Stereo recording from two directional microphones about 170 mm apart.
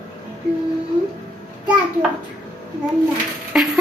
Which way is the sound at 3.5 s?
5° right (ahead or behind).